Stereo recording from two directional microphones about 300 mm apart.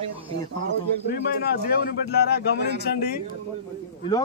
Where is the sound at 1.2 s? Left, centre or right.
Left.